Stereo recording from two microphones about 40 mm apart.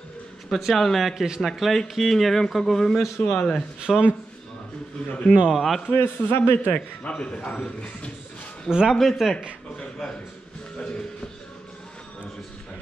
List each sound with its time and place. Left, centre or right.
0.5 s speech: centre
1.1 s speech: centre
1.8 s speech: centre
3.2 s a man's voice: left
3.9 s speech: centre
5.0 s a man's voice: left
5.5 s speech: centre
5.9 s a man's voice: left
7.0 s a man's voice: left
8.6 s speech: centre
9.0 s speech: centre